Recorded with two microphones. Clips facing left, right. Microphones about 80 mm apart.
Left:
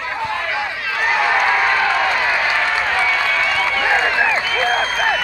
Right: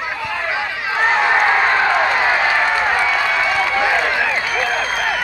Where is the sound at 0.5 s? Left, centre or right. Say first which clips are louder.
Right 2 dB; right.